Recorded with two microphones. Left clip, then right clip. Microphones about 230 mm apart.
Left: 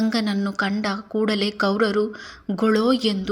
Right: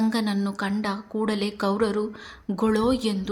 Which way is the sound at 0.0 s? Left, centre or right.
Centre.